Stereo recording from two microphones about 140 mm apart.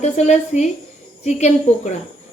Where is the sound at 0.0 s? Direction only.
55° left (ahead or behind).